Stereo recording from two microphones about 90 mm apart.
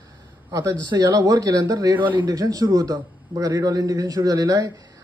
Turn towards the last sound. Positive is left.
turn(degrees=-40)  # may be behind; listen again after turning